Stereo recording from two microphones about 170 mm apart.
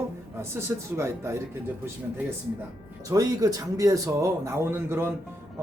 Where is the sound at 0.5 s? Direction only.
15° right (ahead or behind).